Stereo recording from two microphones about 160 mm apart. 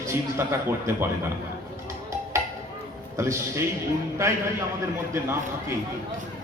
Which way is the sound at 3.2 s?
15° right (ahead or behind).